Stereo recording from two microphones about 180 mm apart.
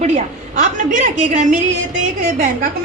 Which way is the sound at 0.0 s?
40° right (ahead or behind).